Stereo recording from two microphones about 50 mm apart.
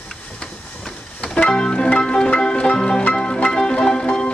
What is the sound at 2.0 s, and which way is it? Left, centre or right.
Music, centre.